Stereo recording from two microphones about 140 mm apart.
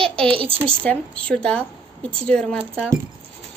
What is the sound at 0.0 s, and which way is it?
Speech, 40° right (ahead or behind).